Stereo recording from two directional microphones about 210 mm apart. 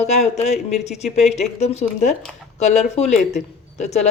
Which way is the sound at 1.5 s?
30° left (ahead or behind).